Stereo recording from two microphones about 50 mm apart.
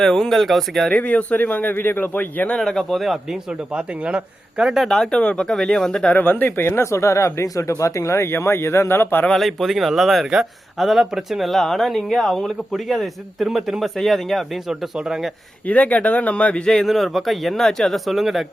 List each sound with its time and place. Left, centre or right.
0.0 s speech: centre
0.9 s speech: left
2.6 s speech: centre
3.7 s speech: right
5.1 s speech: left
6.1 s speech: left
6.7 s speech: left
9.3 s speech: centre
15.6 s speech: left
16.6 s speech: centre